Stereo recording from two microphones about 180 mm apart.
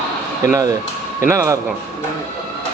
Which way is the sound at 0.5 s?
20° right (ahead or behind).